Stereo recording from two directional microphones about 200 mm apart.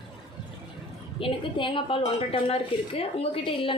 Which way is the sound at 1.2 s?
25° left (ahead or behind).